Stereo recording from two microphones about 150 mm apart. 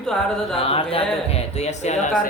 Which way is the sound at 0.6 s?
40° left (ahead or behind).